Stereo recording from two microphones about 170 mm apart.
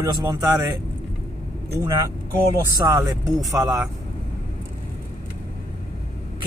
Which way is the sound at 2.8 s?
20° right (ahead or behind).